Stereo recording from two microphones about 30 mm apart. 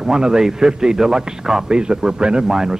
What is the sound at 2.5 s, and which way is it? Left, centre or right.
Speech, centre.